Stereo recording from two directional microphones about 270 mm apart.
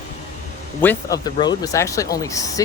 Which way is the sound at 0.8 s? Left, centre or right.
Centre.